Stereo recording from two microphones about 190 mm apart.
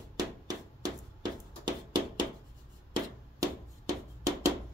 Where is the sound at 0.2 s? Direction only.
20° right (ahead or behind).